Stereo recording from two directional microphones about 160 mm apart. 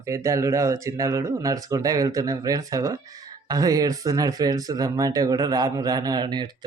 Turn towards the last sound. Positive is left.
turn(degrees=-25)  # may be behind; listen again after turning